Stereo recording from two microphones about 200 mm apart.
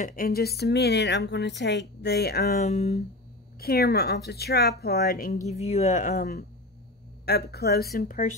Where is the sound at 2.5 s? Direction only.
35° left (ahead or behind).